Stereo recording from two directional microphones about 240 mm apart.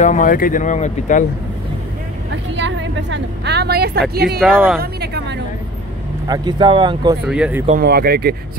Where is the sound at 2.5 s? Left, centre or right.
Right.